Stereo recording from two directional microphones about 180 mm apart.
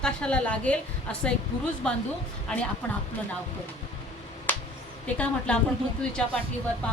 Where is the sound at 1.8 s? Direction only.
5° left (ahead or behind).